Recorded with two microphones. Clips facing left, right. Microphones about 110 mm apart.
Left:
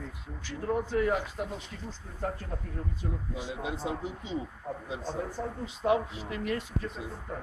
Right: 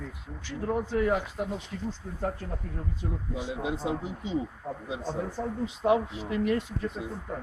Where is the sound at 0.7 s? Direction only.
10° right (ahead or behind).